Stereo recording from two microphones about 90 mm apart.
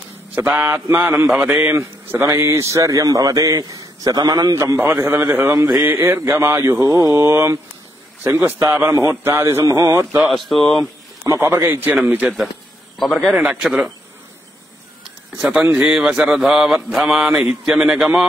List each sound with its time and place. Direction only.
0.3 s a man's voice: 20° right (ahead or behind)
1.3 s mantra: 10° right (ahead or behind)
1.7 s a man's voice: 25° right (ahead or behind)
4.7 s a man's voice: 30° right (ahead or behind)
5.6 s a sound: 45° right (ahead or behind)
5.9 s a man's voice: 35° right (ahead or behind)
7.2 s a man's voice: 30° right (ahead or behind)
10.2 s speech: centre (ahead or behind)
11.2 s a man's voice: 35° right (ahead or behind)
11.8 s a man's voice: 20° right (ahead or behind)
13.3 s mantra: 5° right (ahead or behind)
15.7 s mantra: 10° right (ahead or behind)